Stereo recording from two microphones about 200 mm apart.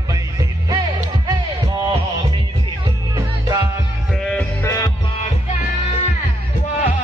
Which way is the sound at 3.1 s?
15° right (ahead or behind).